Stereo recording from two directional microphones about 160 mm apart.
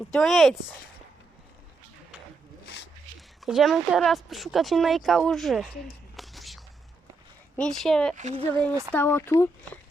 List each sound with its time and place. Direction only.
0.1 s speech: centre (ahead or behind)
3.2 s speech: centre (ahead or behind)
6.1 s whispering: centre (ahead or behind)
7.5 s speech: 5° left (ahead or behind)
8.1 s speech: 45° right (ahead or behind)
8.9 s speech: 15° left (ahead or behind)